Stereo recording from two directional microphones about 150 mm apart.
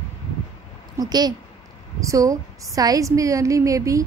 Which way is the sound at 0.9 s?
25° right (ahead or behind).